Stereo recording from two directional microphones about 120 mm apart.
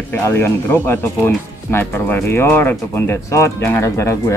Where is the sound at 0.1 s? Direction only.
20° left (ahead or behind).